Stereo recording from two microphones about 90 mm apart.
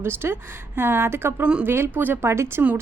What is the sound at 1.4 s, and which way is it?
Speech, 10° right (ahead or behind).